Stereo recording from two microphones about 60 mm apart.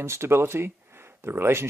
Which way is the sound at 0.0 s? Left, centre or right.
Right.